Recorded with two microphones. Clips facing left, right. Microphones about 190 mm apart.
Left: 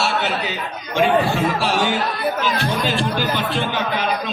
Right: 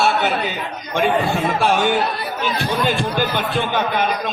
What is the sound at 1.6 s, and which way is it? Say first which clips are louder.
Speech: right 3 dB; 55° right (ahead or behind).